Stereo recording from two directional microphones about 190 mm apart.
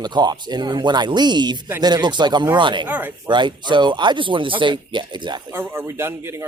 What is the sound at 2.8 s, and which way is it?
Speech, 10° right (ahead or behind).